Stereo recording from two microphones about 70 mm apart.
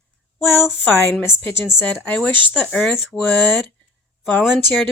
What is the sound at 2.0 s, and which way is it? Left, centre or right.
Speech, centre.